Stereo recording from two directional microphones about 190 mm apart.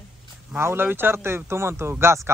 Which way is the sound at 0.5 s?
10° right (ahead or behind).